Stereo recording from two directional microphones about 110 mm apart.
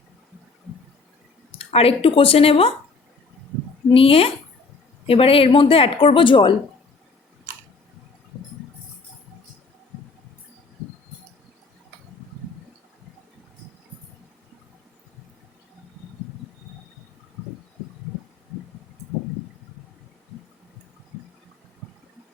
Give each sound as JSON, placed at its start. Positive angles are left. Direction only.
{"t": 1.5, "sound": "a woman's voice", "side_deg": 60}
{"t": 3.9, "sound": "a woman's voice", "side_deg": 60}